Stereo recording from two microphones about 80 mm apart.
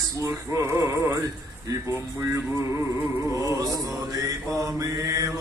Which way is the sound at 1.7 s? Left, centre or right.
Right.